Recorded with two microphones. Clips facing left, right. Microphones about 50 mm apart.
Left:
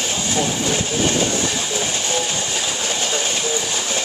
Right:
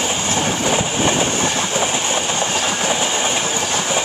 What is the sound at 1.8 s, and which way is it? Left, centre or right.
Train, right.